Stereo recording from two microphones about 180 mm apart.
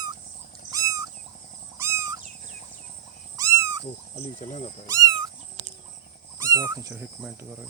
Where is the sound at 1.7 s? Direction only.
15° right (ahead or behind).